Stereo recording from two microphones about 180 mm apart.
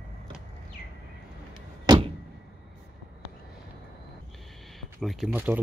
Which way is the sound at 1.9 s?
20° right (ahead or behind).